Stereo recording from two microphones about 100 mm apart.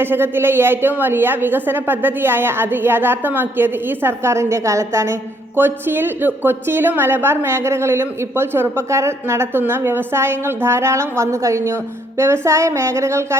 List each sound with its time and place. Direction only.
0.0 s a woman's voice: 20° right (ahead or behind)